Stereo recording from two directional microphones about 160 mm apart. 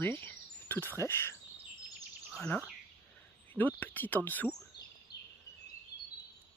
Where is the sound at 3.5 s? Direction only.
10° left (ahead or behind).